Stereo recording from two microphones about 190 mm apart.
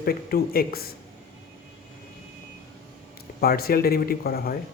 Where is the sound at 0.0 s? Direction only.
50° left (ahead or behind).